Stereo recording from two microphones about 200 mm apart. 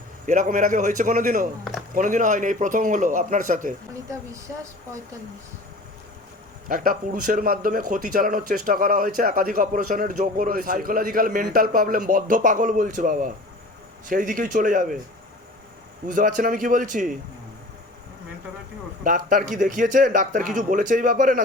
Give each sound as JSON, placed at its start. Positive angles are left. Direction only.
{"t": 0.3, "sound": "a man's voice", "side_deg": -40}
{"t": 6.7, "sound": "a man's voice", "side_deg": -45}
{"t": 16.0, "sound": "a man's voice", "side_deg": -45}
{"t": 19.0, "sound": "a man's voice", "side_deg": -45}